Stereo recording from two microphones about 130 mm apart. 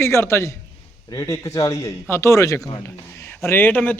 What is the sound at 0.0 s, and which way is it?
A man's voice, 20° left (ahead or behind).